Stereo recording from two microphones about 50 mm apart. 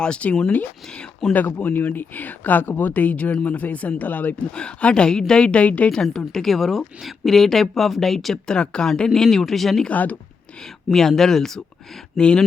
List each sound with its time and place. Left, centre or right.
0.0 s a woman's voice: left
1.3 s speech: left
4.5 s a woman's voice: centre
5.9 s a woman's voice: centre
8.4 s speech: centre
9.9 s speech: left
10.8 s speech: centre